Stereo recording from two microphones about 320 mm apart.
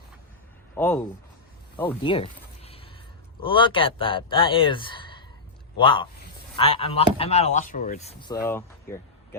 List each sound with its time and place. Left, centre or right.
0.8 s speech: centre
1.7 s a sound: centre
3.4 s speech: centre